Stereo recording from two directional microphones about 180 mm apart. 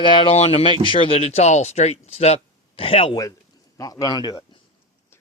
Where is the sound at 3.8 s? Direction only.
20° left (ahead or behind).